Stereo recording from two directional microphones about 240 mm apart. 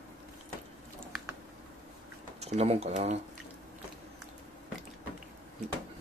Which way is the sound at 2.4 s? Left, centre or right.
Right.